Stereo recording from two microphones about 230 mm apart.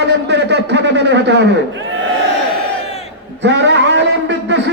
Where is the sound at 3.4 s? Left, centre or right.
Right.